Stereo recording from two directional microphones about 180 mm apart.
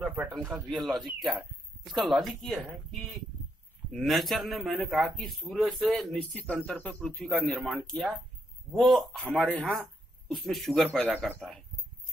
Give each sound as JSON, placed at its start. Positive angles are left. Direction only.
{"t": 0.0, "sound": "a sound", "side_deg": -10}
{"t": 0.3, "sound": "speech", "side_deg": 0}
{"t": 3.9, "sound": "speech", "side_deg": 0}